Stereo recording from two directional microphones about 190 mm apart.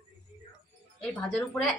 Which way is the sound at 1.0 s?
5° left (ahead or behind).